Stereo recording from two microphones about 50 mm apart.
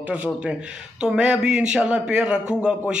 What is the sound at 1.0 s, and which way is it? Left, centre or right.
A man's voice, centre.